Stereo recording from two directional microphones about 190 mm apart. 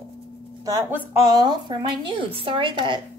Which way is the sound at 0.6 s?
15° right (ahead or behind).